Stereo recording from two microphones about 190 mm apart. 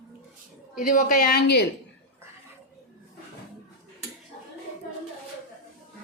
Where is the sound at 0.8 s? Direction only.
45° left (ahead or behind).